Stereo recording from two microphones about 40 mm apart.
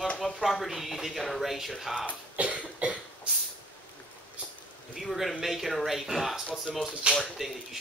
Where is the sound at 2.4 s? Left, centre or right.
Right.